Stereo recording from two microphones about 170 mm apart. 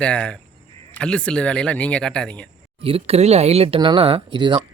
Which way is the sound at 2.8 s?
35° right (ahead or behind).